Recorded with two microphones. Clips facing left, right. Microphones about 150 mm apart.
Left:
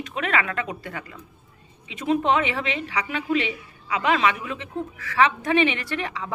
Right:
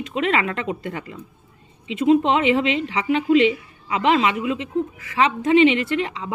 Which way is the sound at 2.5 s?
25° right (ahead or behind).